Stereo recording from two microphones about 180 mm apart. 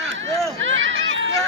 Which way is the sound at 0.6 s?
90° right.